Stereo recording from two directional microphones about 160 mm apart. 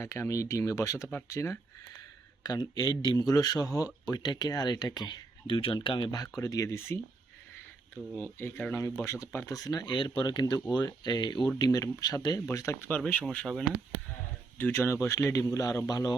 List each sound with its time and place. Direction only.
0.0 s speech: 15° left (ahead or behind)
8.1 s speech: 10° left (ahead or behind)
13.2 s speech: 5° left (ahead or behind)
14.6 s speech: 15° left (ahead or behind)